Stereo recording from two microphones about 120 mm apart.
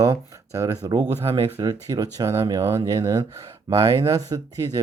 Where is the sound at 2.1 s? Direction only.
25° right (ahead or behind).